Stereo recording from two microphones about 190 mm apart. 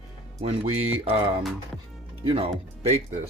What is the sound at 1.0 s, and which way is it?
Speech, 30° right (ahead or behind).